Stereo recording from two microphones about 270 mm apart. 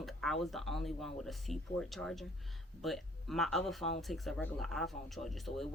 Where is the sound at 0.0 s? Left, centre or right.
Centre.